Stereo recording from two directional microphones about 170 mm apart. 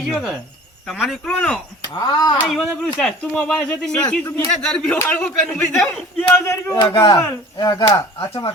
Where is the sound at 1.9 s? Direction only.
25° left (ahead or behind).